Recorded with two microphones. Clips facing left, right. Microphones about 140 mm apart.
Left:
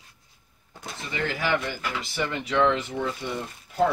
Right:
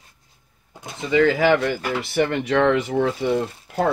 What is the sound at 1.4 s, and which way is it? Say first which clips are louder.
Speech: right 9 dB; 85° right.